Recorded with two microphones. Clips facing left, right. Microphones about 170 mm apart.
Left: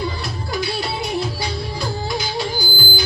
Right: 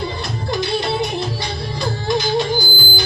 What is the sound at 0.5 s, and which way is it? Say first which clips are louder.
Music: right 4 dB; 5° left (ahead or behind).